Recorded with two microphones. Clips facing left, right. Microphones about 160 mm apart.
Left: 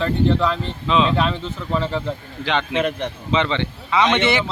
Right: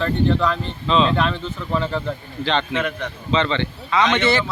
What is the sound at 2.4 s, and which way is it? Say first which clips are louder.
Speech: left 1 dB; 10° left (ahead or behind).